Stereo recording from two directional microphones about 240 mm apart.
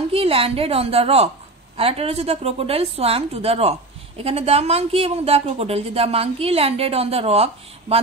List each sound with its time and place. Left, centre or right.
0.1 s speech: right